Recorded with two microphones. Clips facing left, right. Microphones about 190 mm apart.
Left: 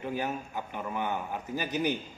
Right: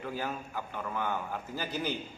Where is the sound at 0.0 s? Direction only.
20° left (ahead or behind).